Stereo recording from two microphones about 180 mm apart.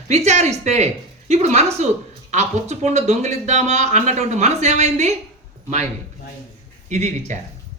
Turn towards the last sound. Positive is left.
turn(degrees=-40)  # may be behind; listen again after turning